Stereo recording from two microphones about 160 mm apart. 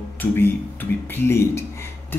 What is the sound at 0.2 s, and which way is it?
Speech, 10° left (ahead or behind).